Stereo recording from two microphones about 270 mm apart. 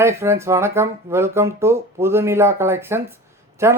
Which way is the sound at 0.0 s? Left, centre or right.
Centre.